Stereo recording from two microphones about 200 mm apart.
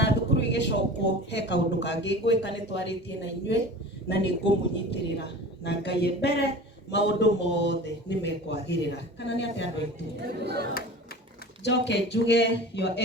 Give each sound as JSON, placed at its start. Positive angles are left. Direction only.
{"t": 0.0, "sound": "a man's voice", "side_deg": 60}
{"t": 10.2, "sound": "speech", "side_deg": -55}
{"t": 11.6, "sound": "speech", "side_deg": 60}